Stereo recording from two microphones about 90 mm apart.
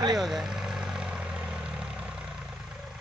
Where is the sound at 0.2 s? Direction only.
Centre (ahead or behind).